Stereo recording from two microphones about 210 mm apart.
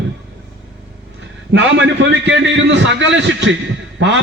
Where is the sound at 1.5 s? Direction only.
60° right (ahead or behind).